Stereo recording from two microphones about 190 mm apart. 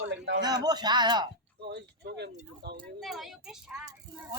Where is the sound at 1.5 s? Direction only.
60° right (ahead or behind).